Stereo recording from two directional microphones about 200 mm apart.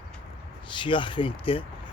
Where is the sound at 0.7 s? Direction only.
25° left (ahead or behind).